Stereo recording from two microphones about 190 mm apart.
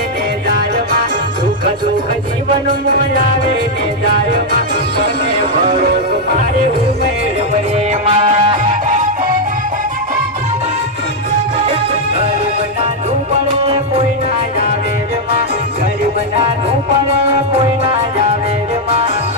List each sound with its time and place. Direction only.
2.6 s music: 45° right (ahead or behind)
5.3 s music: 25° right (ahead or behind)
5.8 s music: 50° right (ahead or behind)
8.1 s music: 30° right (ahead or behind)
11.5 s music: 35° right (ahead or behind)
13.7 s music: 35° right (ahead or behind)
17.1 s music: 30° right (ahead or behind)
18.9 s music: 30° right (ahead or behind)